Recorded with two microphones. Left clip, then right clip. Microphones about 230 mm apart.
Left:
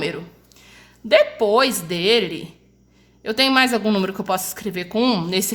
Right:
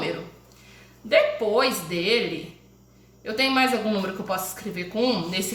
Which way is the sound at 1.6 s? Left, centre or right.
Left.